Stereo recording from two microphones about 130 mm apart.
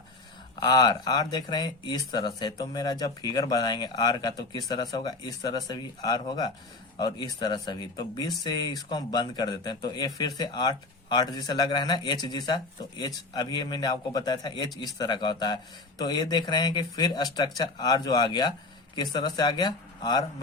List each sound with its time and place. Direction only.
0.6 s speech: 35° left (ahead or behind)